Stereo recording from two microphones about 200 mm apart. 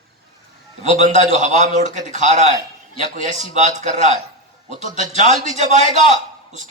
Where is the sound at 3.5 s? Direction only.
35° right (ahead or behind).